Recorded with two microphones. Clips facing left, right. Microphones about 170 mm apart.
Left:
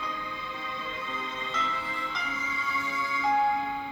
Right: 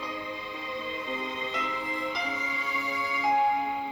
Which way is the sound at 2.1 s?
35° right (ahead or behind).